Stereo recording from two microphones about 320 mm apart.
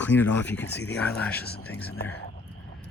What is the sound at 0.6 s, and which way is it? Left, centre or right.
Speech, left.